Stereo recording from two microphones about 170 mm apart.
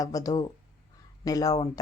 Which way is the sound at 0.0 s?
20° left (ahead or behind).